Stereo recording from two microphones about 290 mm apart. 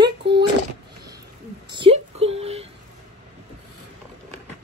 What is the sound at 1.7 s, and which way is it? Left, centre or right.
Speech, centre.